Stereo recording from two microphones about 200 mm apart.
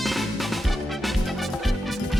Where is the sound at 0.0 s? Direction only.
Centre (ahead or behind).